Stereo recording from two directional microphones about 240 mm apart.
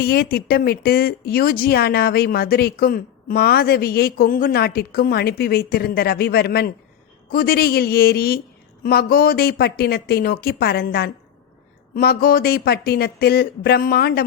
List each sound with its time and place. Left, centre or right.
0.0 s speech: left